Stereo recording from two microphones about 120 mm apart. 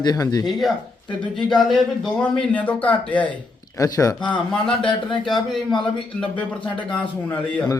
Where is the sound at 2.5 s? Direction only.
10° left (ahead or behind).